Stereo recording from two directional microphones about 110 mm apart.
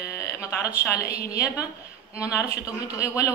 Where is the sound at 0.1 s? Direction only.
25° left (ahead or behind).